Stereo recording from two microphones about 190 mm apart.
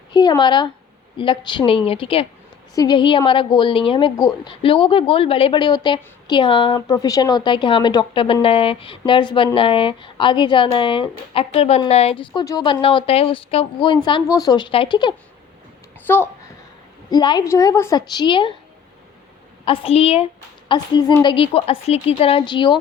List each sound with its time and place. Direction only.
0.1 s a woman's voice: 25° left (ahead or behind)
16.0 s a child's voice: 10° left (ahead or behind)
17.1 s a woman's voice: 20° left (ahead or behind)
19.6 s a woman's voice: 30° left (ahead or behind)